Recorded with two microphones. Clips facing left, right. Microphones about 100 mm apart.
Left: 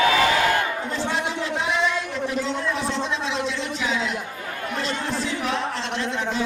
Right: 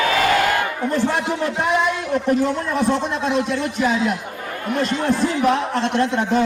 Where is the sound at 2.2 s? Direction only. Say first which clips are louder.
Right 6 dB; 55° right (ahead or behind).